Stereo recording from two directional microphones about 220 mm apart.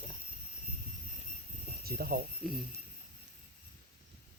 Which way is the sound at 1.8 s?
45° right (ahead or behind).